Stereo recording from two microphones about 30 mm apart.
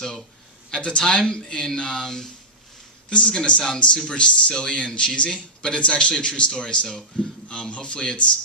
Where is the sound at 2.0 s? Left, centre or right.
Centre.